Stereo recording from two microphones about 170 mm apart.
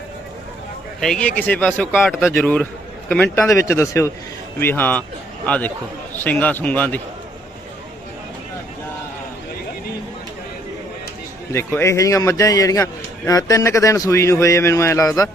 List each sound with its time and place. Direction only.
0.9 s a man's voice: 5° left (ahead or behind)
11.5 s a man's voice: 15° left (ahead or behind)